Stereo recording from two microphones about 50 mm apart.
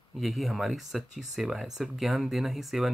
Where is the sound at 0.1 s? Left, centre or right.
Centre.